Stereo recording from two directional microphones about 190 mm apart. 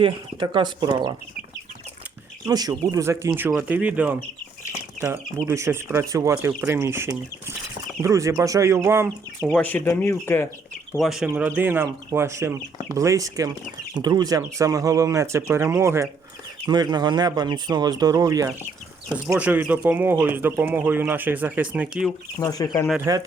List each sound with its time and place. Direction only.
0.0 s speech: 25° right (ahead or behind)
2.5 s speech: 20° right (ahead or behind)
9.6 s speech: 10° left (ahead or behind)
10.9 s speech: centre (ahead or behind)
22.4 s speech: 20° left (ahead or behind)
22.9 s speech: 10° right (ahead or behind)